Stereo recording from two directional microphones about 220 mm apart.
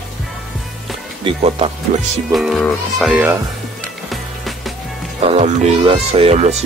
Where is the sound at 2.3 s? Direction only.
Centre (ahead or behind).